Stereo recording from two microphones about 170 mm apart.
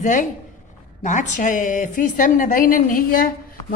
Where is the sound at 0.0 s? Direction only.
50° left (ahead or behind).